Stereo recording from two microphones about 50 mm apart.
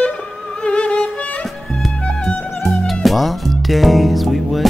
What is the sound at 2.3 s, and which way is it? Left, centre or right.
Music, centre.